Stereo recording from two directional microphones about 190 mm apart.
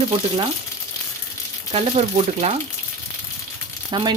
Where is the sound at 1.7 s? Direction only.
35° right (ahead or behind).